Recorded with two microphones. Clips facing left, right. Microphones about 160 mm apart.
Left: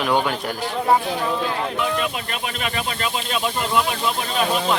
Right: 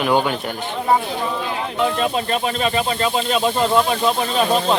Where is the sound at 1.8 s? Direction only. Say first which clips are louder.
Right 4 dB; 30° right (ahead or behind).